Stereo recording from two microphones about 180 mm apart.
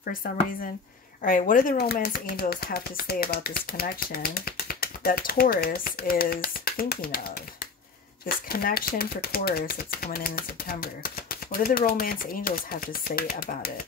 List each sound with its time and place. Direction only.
1.2 s speech: 50° left (ahead or behind)
8.5 s speech: 55° left (ahead or behind)